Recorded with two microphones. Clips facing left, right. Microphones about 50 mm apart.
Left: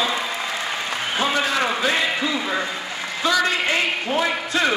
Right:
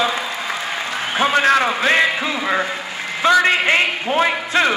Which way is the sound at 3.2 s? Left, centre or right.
Right.